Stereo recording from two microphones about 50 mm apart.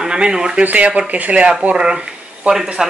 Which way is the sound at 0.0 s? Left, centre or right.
Centre.